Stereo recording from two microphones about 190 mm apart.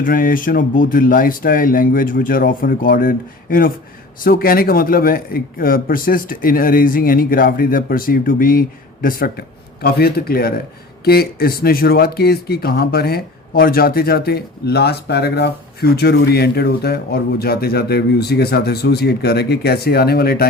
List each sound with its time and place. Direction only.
0.0 s a man's voice: 45° left (ahead or behind)